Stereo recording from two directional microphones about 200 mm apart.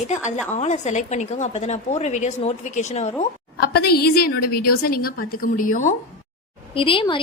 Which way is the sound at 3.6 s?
50° left (ahead or behind).